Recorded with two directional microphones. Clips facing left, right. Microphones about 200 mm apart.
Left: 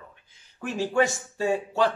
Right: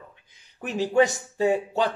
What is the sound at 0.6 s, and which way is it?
Speech, 20° right (ahead or behind).